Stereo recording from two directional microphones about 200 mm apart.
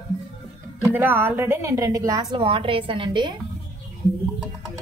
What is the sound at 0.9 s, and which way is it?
A woman's voice, 10° right (ahead or behind).